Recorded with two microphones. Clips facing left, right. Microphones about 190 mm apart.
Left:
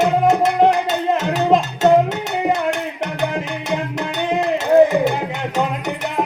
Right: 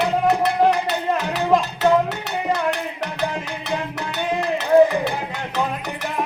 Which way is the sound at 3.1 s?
20° left (ahead or behind).